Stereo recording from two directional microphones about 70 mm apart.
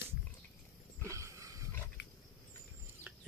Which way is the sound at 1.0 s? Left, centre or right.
Right.